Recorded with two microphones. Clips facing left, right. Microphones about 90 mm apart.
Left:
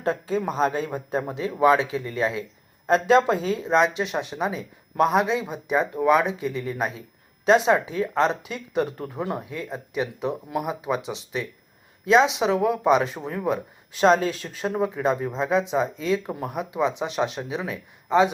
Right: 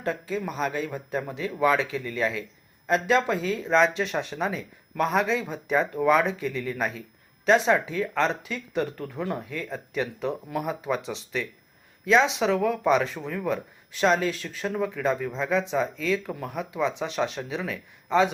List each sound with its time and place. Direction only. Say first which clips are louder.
0.0 s speech: left 4 dB; 30° left (ahead or behind)